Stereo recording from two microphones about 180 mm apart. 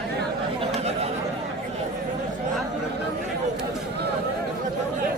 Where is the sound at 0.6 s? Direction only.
35° right (ahead or behind).